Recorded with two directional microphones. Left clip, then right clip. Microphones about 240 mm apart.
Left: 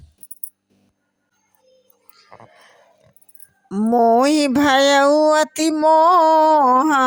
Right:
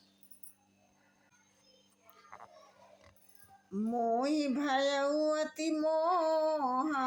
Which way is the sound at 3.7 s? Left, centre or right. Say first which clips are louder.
Left 18 dB; left.